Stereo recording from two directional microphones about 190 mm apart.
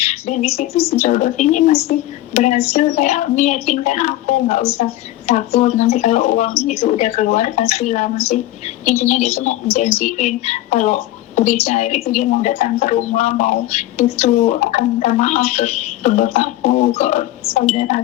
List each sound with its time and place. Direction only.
0.0 s speech: 35° left (ahead or behind)